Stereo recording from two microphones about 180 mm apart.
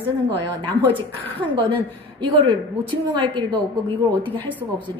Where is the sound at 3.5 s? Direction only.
10° left (ahead or behind).